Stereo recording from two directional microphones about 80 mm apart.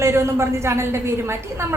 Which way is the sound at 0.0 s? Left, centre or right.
Right.